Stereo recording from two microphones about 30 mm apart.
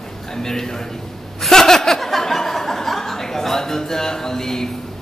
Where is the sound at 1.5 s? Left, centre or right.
Centre.